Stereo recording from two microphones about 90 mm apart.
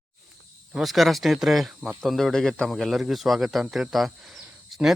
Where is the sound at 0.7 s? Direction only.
Centre (ahead or behind).